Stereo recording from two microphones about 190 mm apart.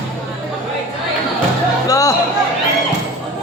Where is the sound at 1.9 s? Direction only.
15° left (ahead or behind).